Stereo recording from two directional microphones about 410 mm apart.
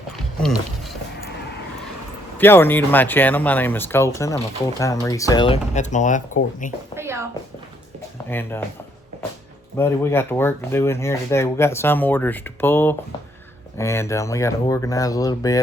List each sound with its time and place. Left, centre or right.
2.4 s speech: centre
6.9 s a sound: centre
8.3 s speech: centre
9.7 s speech: centre